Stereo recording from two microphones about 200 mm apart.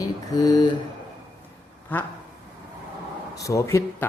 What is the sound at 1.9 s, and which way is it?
Speech, 10° left (ahead or behind).